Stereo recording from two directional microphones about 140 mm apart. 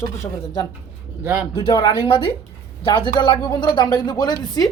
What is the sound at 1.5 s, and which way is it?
A woman's voice, 35° left (ahead or behind).